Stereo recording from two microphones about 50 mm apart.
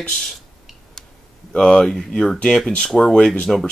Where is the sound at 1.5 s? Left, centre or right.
Centre.